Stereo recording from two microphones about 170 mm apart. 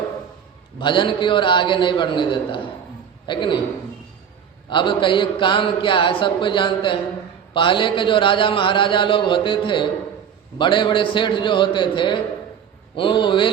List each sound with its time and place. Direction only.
0.8 s speech: 30° left (ahead or behind)
4.7 s speech: 30° left (ahead or behind)